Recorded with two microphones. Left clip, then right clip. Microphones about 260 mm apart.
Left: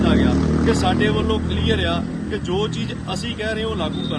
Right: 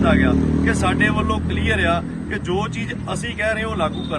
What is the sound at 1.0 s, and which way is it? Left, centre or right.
Speech, centre.